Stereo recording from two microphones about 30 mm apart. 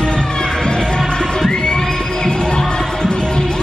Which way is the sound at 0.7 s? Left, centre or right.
Left.